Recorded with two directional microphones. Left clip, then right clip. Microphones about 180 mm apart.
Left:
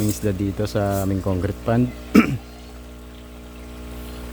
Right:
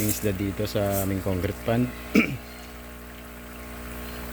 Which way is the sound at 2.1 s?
35° left (ahead or behind).